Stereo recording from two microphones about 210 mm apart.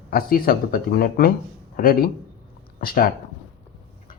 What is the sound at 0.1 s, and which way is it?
Speech, 45° left (ahead or behind).